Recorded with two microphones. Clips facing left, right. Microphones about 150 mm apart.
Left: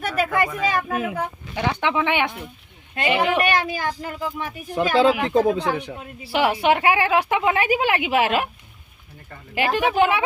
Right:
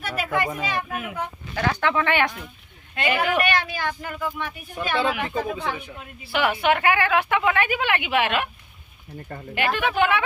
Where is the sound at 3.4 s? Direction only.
40° left (ahead or behind).